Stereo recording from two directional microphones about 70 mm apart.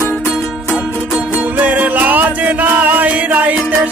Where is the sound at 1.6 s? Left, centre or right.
Right.